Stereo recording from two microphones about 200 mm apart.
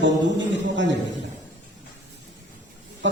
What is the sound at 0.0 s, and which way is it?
Speech, 65° right (ahead or behind).